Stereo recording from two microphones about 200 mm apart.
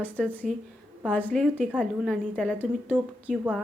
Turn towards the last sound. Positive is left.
turn(degrees=0)  # may be behind; listen again after turning